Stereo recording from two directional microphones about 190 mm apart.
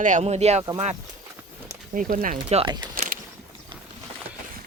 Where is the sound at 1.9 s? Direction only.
45° right (ahead or behind).